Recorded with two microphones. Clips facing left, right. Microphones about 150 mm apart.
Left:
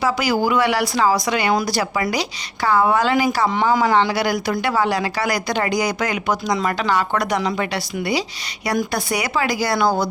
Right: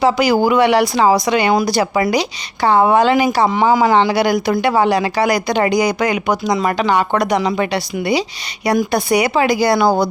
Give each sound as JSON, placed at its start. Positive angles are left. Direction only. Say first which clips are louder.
{"t": 0.0, "sound": "speech", "louder": "right 6 dB", "side_deg": -25}